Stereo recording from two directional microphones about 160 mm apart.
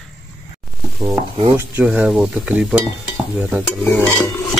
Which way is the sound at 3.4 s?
Centre (ahead or behind).